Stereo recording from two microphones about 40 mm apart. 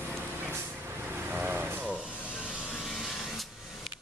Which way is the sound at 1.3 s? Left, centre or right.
Right.